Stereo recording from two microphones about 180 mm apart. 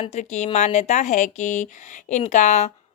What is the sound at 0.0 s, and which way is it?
Speech, 40° left (ahead or behind).